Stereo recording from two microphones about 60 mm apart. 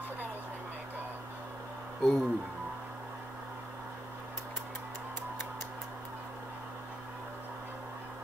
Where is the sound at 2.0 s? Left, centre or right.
Centre.